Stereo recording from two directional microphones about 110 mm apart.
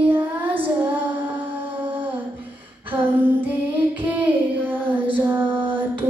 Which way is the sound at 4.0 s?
15° right (ahead or behind).